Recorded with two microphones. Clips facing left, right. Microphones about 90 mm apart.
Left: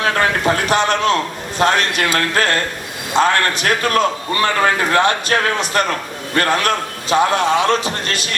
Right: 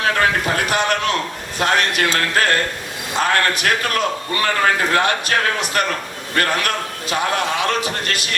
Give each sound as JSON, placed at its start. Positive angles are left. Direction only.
{"t": 0.0, "sound": "a man's voice", "side_deg": 30}